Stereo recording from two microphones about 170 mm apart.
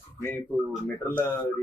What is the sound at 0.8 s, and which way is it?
Speech, 10° left (ahead or behind).